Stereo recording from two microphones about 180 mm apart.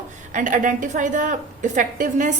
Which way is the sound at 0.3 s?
45° right (ahead or behind).